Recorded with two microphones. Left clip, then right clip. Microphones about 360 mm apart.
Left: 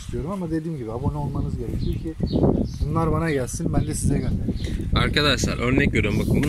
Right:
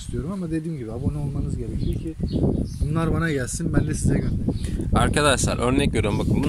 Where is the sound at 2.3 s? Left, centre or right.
Left.